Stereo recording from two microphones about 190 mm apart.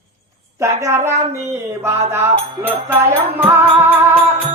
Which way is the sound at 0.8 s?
15° right (ahead or behind).